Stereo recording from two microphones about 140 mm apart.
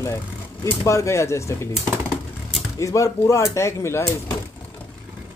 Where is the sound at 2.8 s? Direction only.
20° left (ahead or behind).